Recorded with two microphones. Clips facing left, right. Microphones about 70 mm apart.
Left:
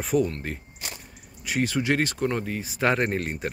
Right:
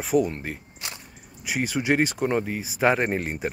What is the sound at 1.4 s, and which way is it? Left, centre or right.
Speech, centre.